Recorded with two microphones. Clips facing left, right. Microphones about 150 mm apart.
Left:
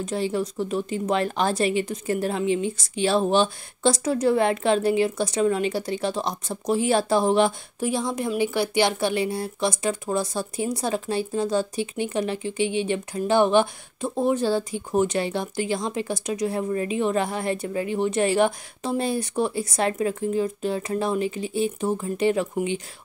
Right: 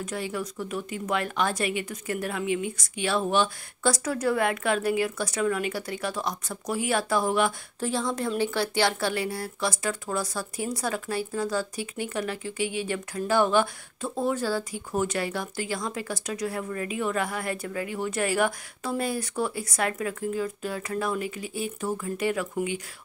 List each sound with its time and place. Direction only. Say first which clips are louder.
0.0 s speech: left 6 dB; 30° left (ahead or behind)
7.8 s speech: left 3 dB; 15° left (ahead or behind)